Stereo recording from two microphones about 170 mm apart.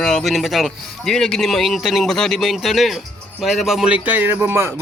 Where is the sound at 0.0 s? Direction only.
5° left (ahead or behind).